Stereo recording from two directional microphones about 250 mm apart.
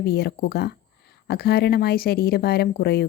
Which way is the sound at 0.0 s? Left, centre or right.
Left.